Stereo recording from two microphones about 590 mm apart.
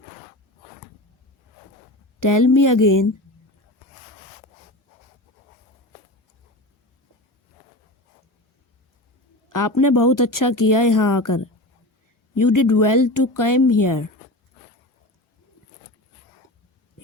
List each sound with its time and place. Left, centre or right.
2.2 s speech: left
9.5 s speech: left